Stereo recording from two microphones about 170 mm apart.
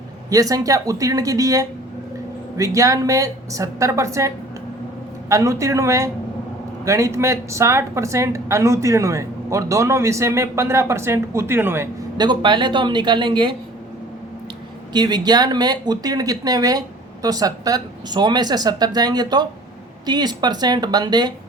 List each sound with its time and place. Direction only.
0.3 s speech: 20° right (ahead or behind)
5.3 s speech: 15° right (ahead or behind)
14.9 s speech: 25° right (ahead or behind)